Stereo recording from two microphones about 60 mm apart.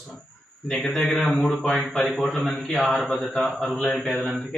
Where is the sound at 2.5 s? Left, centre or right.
Centre.